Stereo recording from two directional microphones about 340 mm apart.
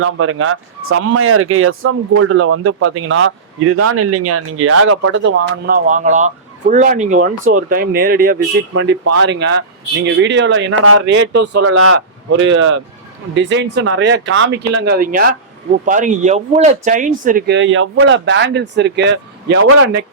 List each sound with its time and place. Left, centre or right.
0.0 s speech: right